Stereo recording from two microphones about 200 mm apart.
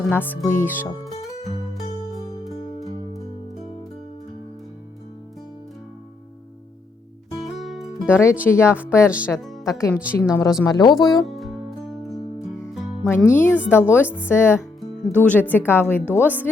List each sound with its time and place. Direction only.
0.0 s speech: 10° left (ahead or behind)
7.6 s music: centre (ahead or behind)
8.0 s speech: 15° left (ahead or behind)
11.3 s music: centre (ahead or behind)
12.1 s music: 15° left (ahead or behind)
13.7 s speech: 10° left (ahead or behind)